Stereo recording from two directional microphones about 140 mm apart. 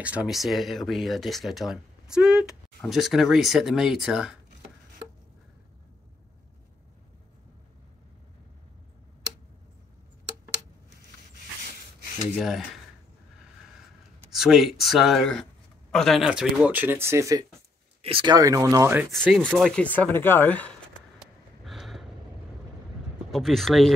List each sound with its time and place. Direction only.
0.0 s speech: 10° right (ahead or behind)
12.4 s speech: centre (ahead or behind)
14.3 s speech: centre (ahead or behind); by 17.5 s 25° right (ahead or behind)
18.0 s speech: 40° right (ahead or behind)
18.3 s speech: 25° right (ahead or behind)
19.2 s speech: 5° left (ahead or behind)
21.2 s snort: centre (ahead or behind)
23.3 s speech: centre (ahead or behind)